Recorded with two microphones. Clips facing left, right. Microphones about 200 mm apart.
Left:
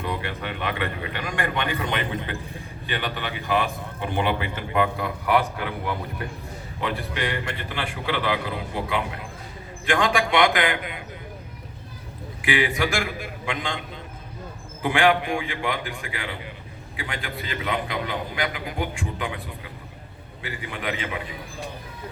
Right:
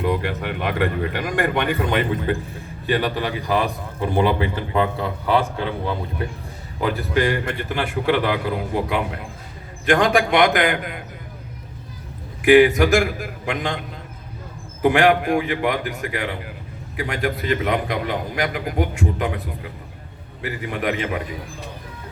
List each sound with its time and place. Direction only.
0.1 s speech: 55° right (ahead or behind)
1.9 s a man's voice: 45° right (ahead or behind); by 6.0 s 25° right (ahead or behind)
6.7 s a man's voice: 40° right (ahead or behind)
12.5 s a man's voice: 45° right (ahead or behind)
14.8 s a man's voice: 45° right (ahead or behind)